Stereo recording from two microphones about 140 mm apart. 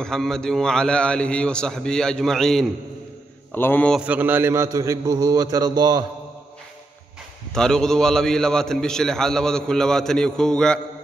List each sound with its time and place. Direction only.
0.0 s a man's voice: 5° left (ahead or behind)
3.5 s a man's voice: 15° left (ahead or behind)
4.0 s a man's voice: 10° right (ahead or behind); by 6.0 s 30° right (ahead or behind)
7.5 s a man's voice: 5° left (ahead or behind)